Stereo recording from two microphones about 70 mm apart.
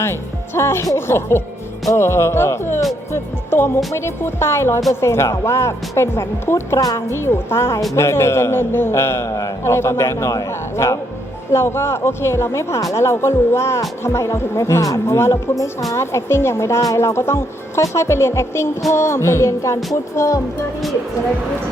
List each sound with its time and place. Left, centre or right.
0.0 s a man's voice: left
6.7 s a man's voice: left